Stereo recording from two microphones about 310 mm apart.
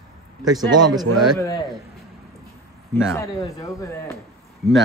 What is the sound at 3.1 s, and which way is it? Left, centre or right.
Speech, centre.